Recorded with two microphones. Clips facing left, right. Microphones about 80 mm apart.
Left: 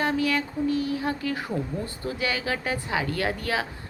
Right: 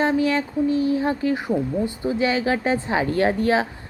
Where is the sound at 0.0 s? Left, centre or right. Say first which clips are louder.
Right 5 dB; right.